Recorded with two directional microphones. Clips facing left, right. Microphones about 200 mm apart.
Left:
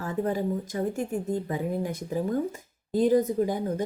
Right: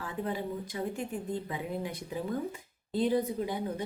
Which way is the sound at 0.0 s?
45° left (ahead or behind).